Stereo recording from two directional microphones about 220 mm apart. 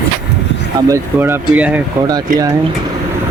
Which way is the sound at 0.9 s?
10° right (ahead or behind).